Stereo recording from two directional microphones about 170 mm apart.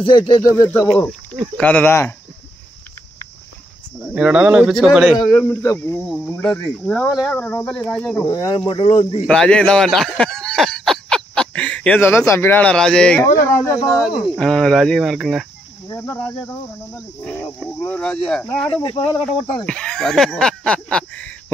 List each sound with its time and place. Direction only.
0.3 s speech: 20° left (ahead or behind)
0.7 s speech: 10° left (ahead or behind)
4.0 s speech: 5° right (ahead or behind)
5.5 s speech: 20° left (ahead or behind)
5.9 s speech: 5° left (ahead or behind)
8.3 s speech: 25° left (ahead or behind)
9.3 s speech: 5° left (ahead or behind)
13.2 s speech: 15° left (ahead or behind)
14.0 s speech: centre (ahead or behind)